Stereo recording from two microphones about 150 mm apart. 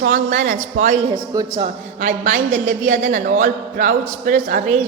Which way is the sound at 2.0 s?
60° right (ahead or behind).